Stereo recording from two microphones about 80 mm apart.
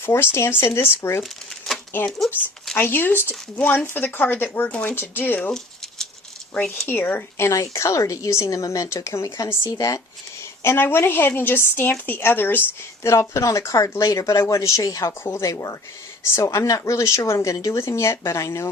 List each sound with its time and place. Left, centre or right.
0.0 s a woman's voice: left
1.2 s shuffling cards: centre
2.0 s speech: centre
2.7 s speech: left
6.8 s a woman's voice: left
10.6 s speech: left
13.0 s a woman's voice: left